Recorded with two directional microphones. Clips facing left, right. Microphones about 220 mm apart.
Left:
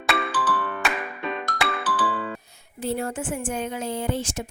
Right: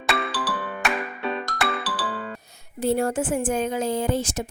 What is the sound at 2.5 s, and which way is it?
Speech, 40° right (ahead or behind).